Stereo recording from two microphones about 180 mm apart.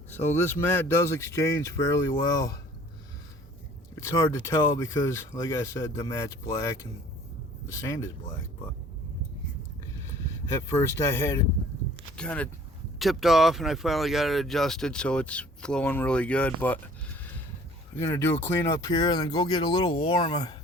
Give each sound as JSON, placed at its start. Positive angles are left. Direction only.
{"t": 0.1, "sound": "speech", "side_deg": 10}
{"t": 4.0, "sound": "speech", "side_deg": 15}
{"t": 10.7, "sound": "speech", "side_deg": 15}
{"t": 17.9, "sound": "speech", "side_deg": 10}